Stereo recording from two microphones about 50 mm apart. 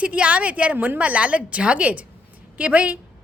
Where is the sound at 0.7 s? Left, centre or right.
Right.